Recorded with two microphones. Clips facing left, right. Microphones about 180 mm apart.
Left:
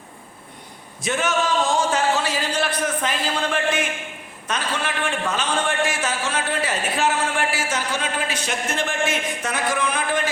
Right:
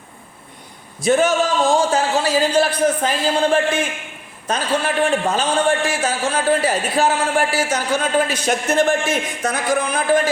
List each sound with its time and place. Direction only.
1.0 s a man's voice: 35° right (ahead or behind)